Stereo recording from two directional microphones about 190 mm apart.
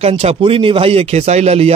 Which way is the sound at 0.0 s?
30° right (ahead or behind).